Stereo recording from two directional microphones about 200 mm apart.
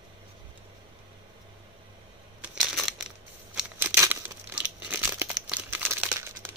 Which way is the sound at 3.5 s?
10° right (ahead or behind).